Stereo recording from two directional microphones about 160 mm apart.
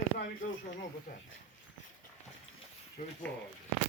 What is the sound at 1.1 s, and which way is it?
Speech, 60° left (ahead or behind).